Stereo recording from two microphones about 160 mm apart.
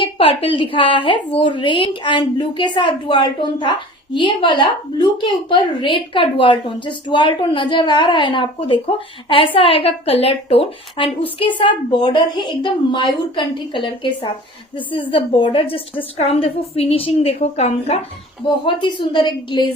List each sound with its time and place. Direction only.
0.0 s a woman's voice: 35° left (ahead or behind)
18.4 s a woman's voice: 30° left (ahead or behind)